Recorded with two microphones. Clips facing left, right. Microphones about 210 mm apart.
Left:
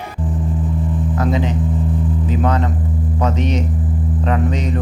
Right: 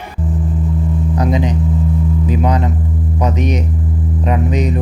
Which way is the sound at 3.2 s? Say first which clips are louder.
Right 1 dB; 10° right (ahead or behind).